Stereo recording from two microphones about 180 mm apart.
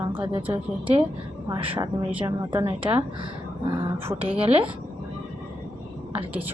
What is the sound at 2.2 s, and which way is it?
Speech, 15° right (ahead or behind).